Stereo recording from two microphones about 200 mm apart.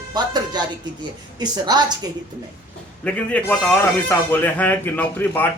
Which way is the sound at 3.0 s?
5° left (ahead or behind).